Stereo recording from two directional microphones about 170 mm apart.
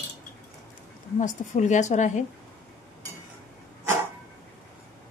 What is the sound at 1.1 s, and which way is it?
A woman's voice, 45° left (ahead or behind).